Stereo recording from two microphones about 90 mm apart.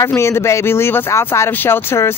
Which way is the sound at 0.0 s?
30° left (ahead or behind).